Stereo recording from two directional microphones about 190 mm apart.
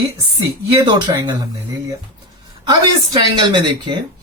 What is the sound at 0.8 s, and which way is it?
Speech, 20° right (ahead or behind).